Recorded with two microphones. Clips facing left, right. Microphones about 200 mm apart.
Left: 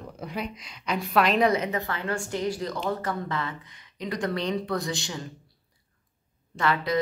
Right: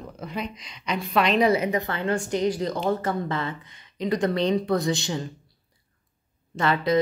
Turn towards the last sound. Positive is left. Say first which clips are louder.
# right 3 dB
turn(degrees=-25)  # may be behind; listen again after turning